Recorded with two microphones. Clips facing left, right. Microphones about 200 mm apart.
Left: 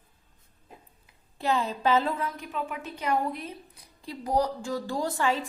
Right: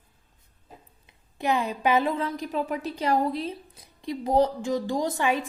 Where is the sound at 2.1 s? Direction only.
30° right (ahead or behind).